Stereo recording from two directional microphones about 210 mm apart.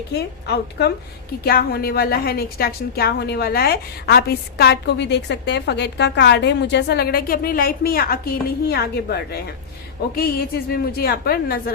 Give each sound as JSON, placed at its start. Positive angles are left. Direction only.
{"t": 0.1, "sound": "a woman's voice", "side_deg": 50}